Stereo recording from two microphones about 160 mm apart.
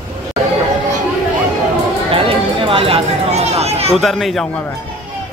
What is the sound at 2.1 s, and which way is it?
Chatter, 35° right (ahead or behind).